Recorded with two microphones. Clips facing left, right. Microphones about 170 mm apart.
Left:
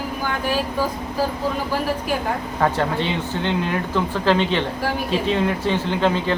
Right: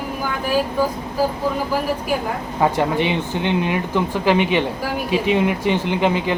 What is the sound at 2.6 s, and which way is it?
Speech, 15° right (ahead or behind).